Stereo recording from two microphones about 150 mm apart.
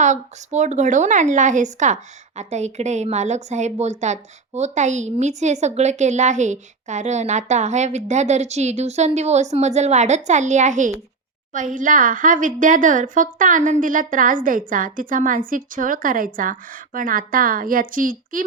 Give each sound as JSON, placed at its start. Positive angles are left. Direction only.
{"t": 0.0, "sound": "a woman's voice", "side_deg": -50}